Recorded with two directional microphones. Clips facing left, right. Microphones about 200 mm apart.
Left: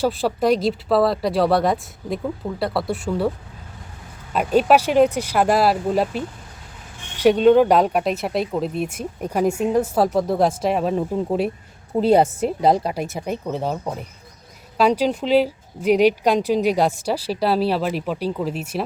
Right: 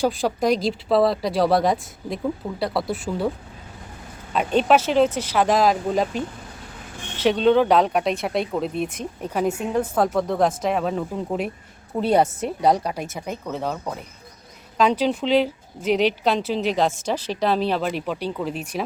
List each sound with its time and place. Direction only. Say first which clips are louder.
0.0 s speech: left 1 dB; 5° left (ahead or behind)
11.9 s speech: left 3 dB; 30° left (ahead or behind)
13.2 s speech: left 2 dB; 15° left (ahead or behind)
14.8 s speech: left 2 dB; 10° left (ahead or behind)